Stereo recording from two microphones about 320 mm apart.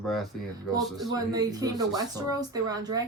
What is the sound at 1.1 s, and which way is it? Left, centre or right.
Speech, centre.